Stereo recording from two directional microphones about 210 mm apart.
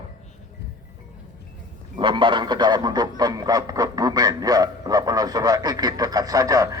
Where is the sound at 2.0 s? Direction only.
25° right (ahead or behind).